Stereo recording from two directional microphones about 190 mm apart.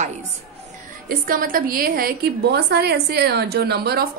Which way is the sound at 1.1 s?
45° right (ahead or behind).